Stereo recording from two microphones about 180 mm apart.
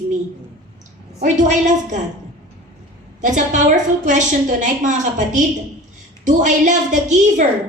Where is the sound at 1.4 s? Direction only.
45° right (ahead or behind).